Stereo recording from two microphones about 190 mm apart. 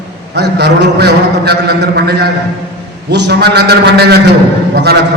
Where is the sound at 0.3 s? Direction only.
60° right (ahead or behind).